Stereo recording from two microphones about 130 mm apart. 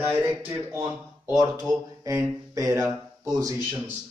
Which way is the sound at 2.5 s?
25° right (ahead or behind).